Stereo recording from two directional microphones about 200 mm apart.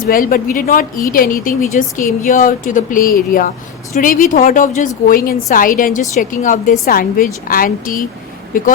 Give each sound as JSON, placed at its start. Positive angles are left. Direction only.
{"t": 0.0, "sound": "speech", "side_deg": 45}